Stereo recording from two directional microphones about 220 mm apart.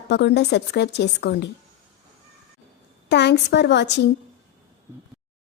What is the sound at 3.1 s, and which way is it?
Speech, 50° left (ahead or behind).